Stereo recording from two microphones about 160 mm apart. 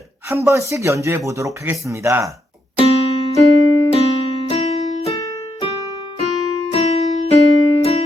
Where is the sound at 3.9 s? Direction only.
35° left (ahead or behind).